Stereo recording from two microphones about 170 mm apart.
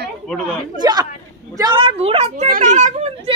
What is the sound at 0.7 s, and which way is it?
A woman's voice, 25° right (ahead or behind).